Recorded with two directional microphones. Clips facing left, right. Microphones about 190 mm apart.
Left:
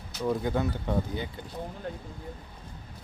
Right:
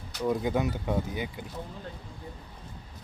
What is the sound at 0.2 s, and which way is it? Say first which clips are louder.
Speech: right 1 dB; 15° right (ahead or behind).